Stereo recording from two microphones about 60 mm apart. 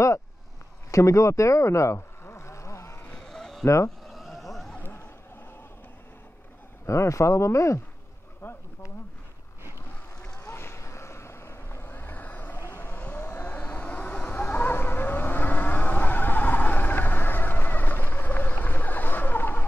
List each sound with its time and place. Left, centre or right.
0.9 s vehicle: left
3.2 s sheep: centre
3.6 s speech: left
4.1 s a sound: centre
6.9 s speech: left
8.4 s bee: left
10.4 s vehicle: left
13.2 s a sound: left